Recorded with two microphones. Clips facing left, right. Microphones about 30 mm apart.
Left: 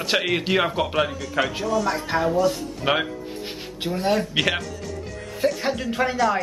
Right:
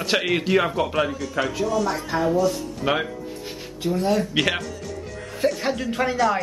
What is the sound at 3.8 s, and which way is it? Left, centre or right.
Speech, left.